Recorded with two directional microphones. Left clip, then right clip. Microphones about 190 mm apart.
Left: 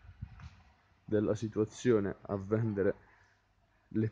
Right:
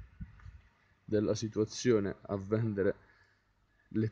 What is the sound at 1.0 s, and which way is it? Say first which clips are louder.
Speech: even; 10° right (ahead or behind).